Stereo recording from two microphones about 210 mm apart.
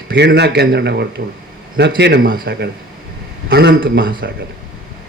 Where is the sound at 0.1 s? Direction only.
50° right (ahead or behind).